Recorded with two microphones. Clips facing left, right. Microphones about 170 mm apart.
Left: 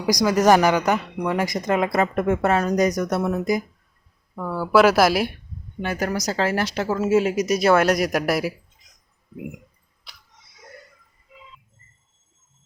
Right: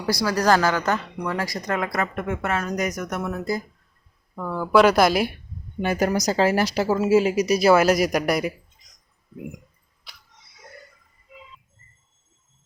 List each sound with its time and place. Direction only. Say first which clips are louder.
0.0 s speech: left 4 dB; 15° left (ahead or behind)
2.1 s speech: left 6 dB; 40° left (ahead or behind); by 3.6 s 20° left (ahead or behind)
4.4 s speech: even; 5° left (ahead or behind)
5.8 s speech: right 3 dB; 15° right (ahead or behind); by 8.5 s centre (ahead or behind)